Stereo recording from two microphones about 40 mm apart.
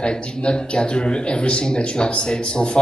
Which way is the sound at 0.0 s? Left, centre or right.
Left.